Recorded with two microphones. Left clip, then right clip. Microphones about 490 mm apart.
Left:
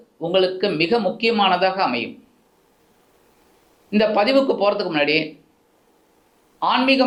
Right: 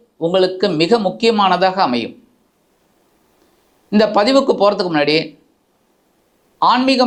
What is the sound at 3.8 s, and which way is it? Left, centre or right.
Speech, right.